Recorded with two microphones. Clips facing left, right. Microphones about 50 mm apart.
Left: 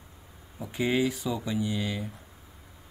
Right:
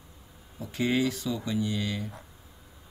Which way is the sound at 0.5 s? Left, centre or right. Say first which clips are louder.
Even; centre.